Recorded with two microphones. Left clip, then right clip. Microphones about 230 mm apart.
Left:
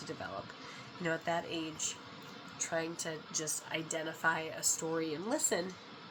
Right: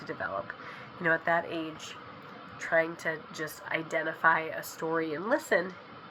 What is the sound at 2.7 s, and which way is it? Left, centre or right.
Speech, left.